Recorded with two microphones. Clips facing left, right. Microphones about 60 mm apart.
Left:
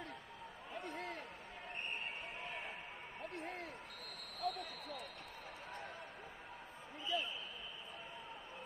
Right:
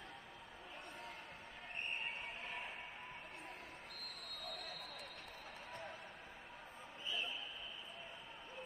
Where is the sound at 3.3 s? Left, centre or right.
Left.